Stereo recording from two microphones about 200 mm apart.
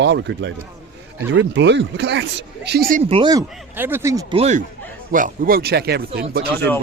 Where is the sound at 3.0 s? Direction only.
25° right (ahead or behind).